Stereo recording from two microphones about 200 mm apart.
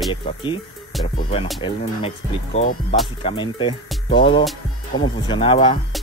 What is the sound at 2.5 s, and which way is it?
Speech, 30° left (ahead or behind).